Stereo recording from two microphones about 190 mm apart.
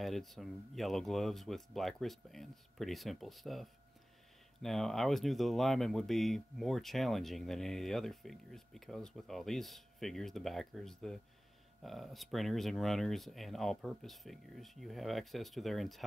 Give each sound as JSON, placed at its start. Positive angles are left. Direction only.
{"t": 0.0, "sound": "speech", "side_deg": 0}